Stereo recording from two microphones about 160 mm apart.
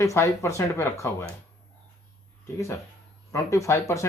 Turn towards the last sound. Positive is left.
turn(degrees=20)  # may be behind; listen again after turning